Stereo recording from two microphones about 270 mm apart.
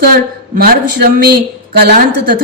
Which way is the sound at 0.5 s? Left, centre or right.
Right.